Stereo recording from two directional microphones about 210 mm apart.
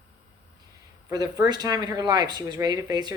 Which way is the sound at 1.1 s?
20° right (ahead or behind).